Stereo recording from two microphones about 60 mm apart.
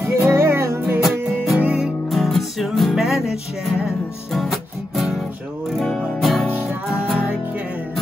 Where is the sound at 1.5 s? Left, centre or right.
Right.